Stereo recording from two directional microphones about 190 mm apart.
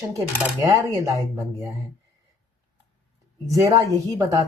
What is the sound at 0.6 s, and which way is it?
Speech, 20° right (ahead or behind).